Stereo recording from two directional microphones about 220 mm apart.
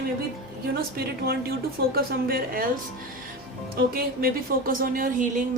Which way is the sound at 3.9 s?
40° right (ahead or behind).